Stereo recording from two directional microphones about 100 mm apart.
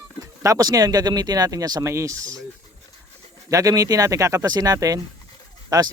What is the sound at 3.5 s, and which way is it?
Speech, 35° right (ahead or behind).